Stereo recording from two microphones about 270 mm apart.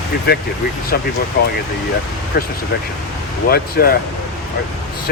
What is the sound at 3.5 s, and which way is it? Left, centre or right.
Speech, left.